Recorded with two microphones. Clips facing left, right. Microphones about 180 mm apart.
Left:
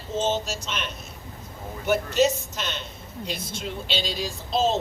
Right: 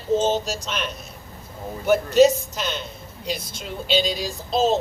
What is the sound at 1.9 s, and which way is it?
A woman's voice, 40° right (ahead or behind).